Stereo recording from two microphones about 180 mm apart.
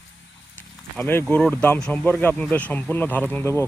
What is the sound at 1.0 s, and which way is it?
Speech, 10° left (ahead or behind).